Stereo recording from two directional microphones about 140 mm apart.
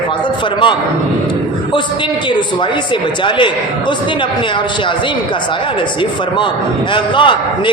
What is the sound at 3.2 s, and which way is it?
Speech, 35° left (ahead or behind).